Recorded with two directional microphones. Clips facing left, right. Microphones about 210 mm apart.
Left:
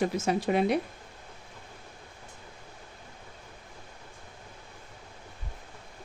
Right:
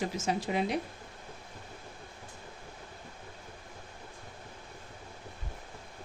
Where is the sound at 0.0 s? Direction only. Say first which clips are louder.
Left 5 dB; 60° left (ahead or behind).